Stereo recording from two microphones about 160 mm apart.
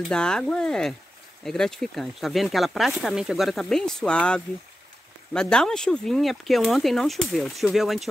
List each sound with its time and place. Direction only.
0.0 s speech: 5° left (ahead or behind)